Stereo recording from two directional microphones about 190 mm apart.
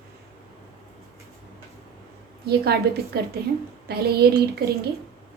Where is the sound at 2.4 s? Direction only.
55° right (ahead or behind).